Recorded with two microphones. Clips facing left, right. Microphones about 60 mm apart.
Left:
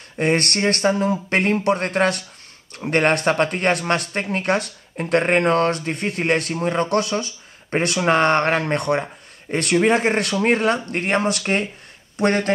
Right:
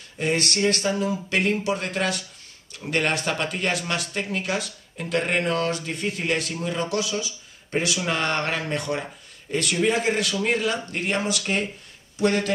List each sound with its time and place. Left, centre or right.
0.2 s speech: left